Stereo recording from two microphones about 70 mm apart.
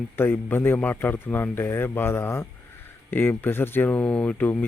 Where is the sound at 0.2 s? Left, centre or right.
Left.